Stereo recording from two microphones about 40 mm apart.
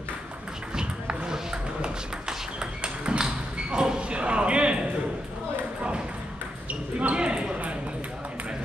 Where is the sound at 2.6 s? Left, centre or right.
Right.